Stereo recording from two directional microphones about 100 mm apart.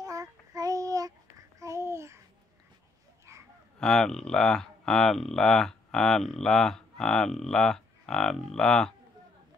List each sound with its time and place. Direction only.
0.0 s child singing: 35° right (ahead or behind)
1.6 s babbling: 30° right (ahead or behind)
3.8 s speech: 5° left (ahead or behind)